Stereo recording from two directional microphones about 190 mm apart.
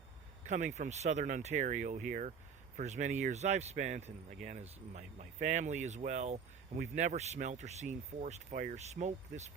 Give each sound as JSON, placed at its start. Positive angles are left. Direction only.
{"t": 0.4, "sound": "speech", "side_deg": -40}